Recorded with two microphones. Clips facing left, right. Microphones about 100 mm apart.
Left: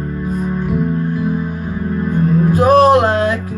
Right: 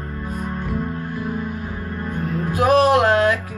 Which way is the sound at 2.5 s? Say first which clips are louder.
Left 4 dB; 40° left (ahead or behind).